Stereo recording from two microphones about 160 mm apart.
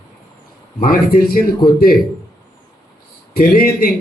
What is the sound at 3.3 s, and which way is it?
Speech, 70° left (ahead or behind).